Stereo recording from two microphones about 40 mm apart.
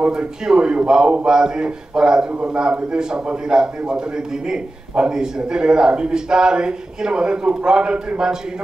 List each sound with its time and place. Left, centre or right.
0.5 s a man's voice: right